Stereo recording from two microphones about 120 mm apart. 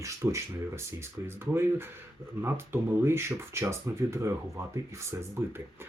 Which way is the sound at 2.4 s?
20° right (ahead or behind).